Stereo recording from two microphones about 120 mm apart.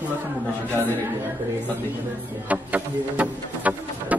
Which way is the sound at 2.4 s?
15° right (ahead or behind).